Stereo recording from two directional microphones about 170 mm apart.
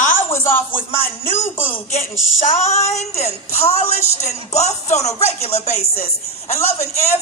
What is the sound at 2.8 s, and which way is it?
Music, 40° left (ahead or behind).